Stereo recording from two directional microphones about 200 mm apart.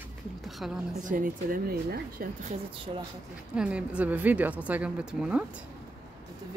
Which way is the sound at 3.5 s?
5° right (ahead or behind).